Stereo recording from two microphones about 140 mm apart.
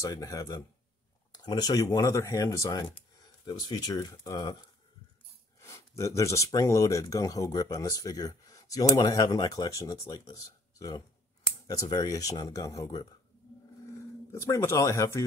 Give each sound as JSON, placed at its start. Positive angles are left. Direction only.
{"t": 0.0, "sound": "speech", "side_deg": 25}
{"t": 5.6, "sound": "speech", "side_deg": 20}
{"t": 14.3, "sound": "speech", "side_deg": 20}